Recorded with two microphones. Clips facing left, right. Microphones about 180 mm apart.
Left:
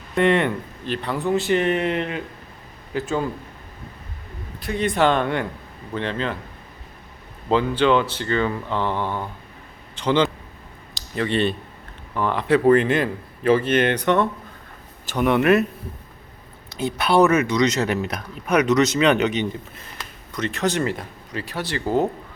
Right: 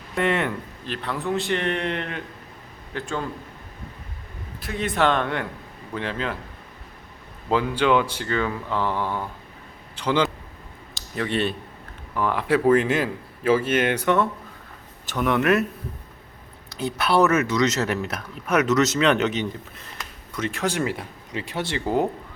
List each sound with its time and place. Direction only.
0.1 s a man's voice: centre (ahead or behind)
4.6 s speech: centre (ahead or behind)
7.5 s speech: 10° right (ahead or behind)
10.9 s a sound: centre (ahead or behind)
12.1 s speech: 5° right (ahead or behind)
16.6 s speech: centre (ahead or behind)
21.3 s speech: 25° right (ahead or behind)